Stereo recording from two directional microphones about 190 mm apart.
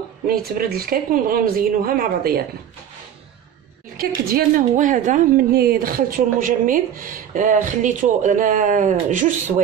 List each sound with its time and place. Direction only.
0.3 s a woman's voice: 50° right (ahead or behind)
3.9 s a woman's voice: 50° right (ahead or behind)